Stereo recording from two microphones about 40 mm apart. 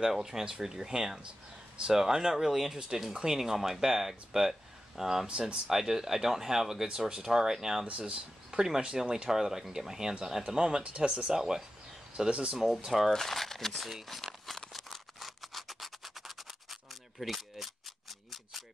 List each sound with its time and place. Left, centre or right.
0.0 s speech: centre
12.3 s speech: right
12.8 s speech: centre
13.1 s speech: centre
14.0 s crumpling: centre
14.7 s scratch: centre
17.2 s speech: centre